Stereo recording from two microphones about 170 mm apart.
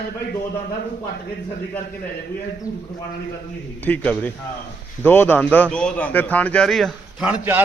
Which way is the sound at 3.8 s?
10° left (ahead or behind).